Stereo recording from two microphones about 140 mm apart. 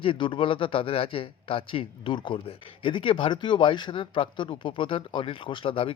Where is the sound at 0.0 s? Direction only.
35° left (ahead or behind).